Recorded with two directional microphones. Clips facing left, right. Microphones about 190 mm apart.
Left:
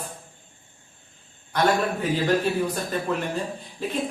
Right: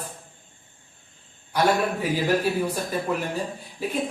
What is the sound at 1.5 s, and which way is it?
Speech, 10° right (ahead or behind).